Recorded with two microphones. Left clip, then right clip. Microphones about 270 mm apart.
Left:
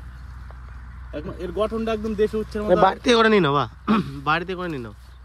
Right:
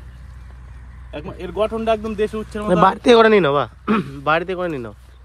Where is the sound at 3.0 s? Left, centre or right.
Centre.